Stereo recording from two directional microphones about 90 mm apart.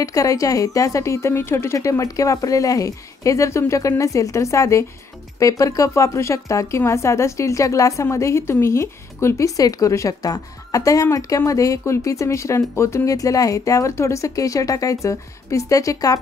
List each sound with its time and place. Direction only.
0.0 s a woman's voice: 40° left (ahead or behind)